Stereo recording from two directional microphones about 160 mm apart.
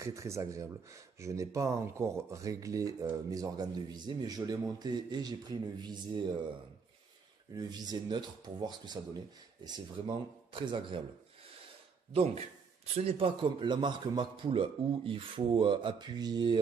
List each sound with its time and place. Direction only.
0.0 s speech: 20° right (ahead or behind)
7.5 s a man's voice: 25° right (ahead or behind)
12.1 s a man's voice: 40° right (ahead or behind)